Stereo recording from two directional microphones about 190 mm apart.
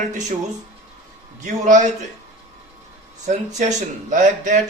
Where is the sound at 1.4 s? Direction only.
40° right (ahead or behind).